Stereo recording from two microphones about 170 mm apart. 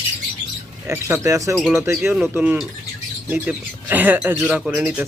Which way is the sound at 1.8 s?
15° right (ahead or behind).